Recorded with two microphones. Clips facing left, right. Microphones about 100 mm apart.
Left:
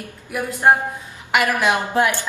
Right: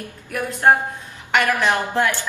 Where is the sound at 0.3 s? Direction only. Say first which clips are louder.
Even; 15° left (ahead or behind).